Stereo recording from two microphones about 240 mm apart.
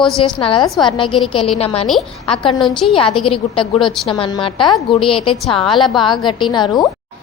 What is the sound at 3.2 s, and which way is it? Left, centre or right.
A woman's voice, left.